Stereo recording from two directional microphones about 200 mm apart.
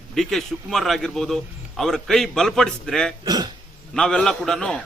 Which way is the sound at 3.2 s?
20° right (ahead or behind).